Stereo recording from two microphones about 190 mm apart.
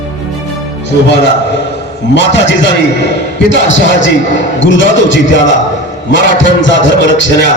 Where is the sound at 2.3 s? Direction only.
70° left (ahead or behind).